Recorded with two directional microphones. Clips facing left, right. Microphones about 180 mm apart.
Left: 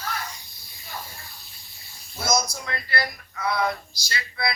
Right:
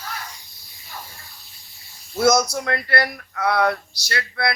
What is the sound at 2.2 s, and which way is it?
Speech, 70° right (ahead or behind).